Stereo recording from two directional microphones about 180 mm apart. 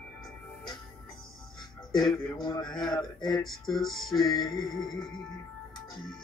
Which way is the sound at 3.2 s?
Centre (ahead or behind).